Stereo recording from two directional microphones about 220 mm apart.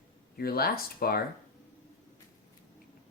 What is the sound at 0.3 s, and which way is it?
Speech, 45° left (ahead or behind).